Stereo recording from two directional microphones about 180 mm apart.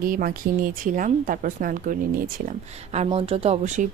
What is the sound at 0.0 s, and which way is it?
A woman's voice, 50° right (ahead or behind).